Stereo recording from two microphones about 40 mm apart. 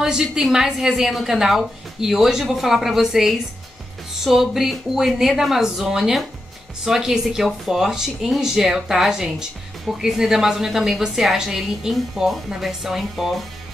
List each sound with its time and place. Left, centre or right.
0.0 s a woman's voice: centre